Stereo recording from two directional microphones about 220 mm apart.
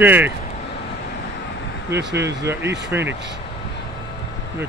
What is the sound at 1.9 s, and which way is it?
Speech, 50° right (ahead or behind).